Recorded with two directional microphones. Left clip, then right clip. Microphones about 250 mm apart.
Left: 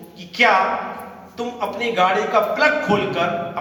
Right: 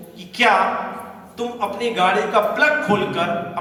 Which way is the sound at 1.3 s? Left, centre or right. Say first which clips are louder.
Right 1 dB; centre.